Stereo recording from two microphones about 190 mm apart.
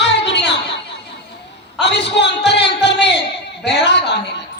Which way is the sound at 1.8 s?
65° left (ahead or behind).